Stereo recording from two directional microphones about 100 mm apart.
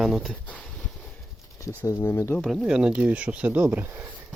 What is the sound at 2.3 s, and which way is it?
Speech, 5° right (ahead or behind).